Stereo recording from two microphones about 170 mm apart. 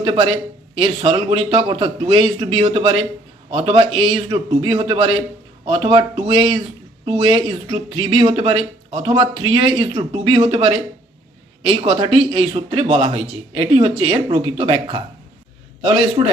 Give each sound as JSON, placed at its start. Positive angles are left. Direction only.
{"t": 0.0, "sound": "a man's voice", "side_deg": -30}
{"t": 16.2, "sound": "speech", "side_deg": -35}